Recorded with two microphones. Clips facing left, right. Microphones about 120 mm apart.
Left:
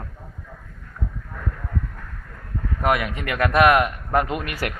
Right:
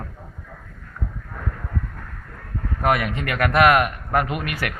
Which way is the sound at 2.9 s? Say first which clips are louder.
Right 1 dB; 15° left (ahead or behind).